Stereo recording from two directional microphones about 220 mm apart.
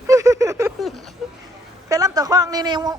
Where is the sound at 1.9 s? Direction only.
15° right (ahead or behind).